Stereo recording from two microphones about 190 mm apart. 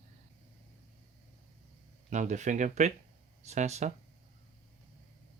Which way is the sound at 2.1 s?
40° right (ahead or behind).